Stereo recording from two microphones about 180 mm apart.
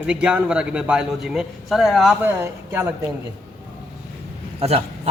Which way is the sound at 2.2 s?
10° right (ahead or behind).